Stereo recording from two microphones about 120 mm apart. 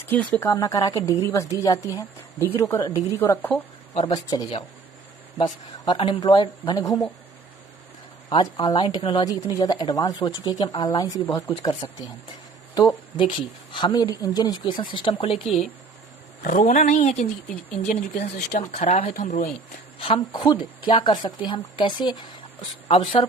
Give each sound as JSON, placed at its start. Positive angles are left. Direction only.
{"t": 0.0, "sound": "a woman's voice", "side_deg": 15}
{"t": 4.1, "sound": "speech", "side_deg": 30}
{"t": 5.8, "sound": "speech", "side_deg": 45}
{"t": 8.3, "sound": "speech", "side_deg": 40}
{"t": 16.4, "sound": "speech", "side_deg": 90}
{"t": 20.1, "sound": "speech", "side_deg": 40}
{"t": 22.9, "sound": "speech", "side_deg": 55}